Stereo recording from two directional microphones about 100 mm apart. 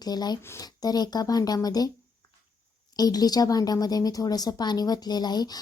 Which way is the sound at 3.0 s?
40° left (ahead or behind).